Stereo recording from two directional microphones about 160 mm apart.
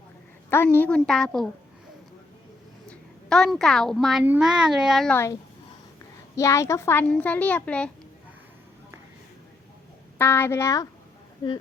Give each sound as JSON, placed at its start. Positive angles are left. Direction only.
{"t": 0.5, "sound": "a child's voice", "side_deg": 15}
{"t": 3.2, "sound": "a woman's voice", "side_deg": 0}
{"t": 5.1, "sound": "a child's voice", "side_deg": 15}
{"t": 10.2, "sound": "a child's voice", "side_deg": 15}